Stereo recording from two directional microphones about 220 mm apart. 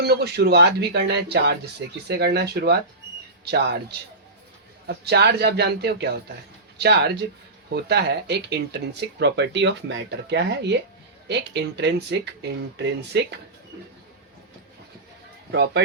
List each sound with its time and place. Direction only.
0.0 s speech: 45° right (ahead or behind)
15.5 s speech: 50° right (ahead or behind)